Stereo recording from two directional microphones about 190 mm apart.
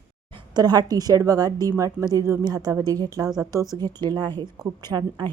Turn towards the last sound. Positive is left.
turn(degrees=-20)  # may be behind; listen again after turning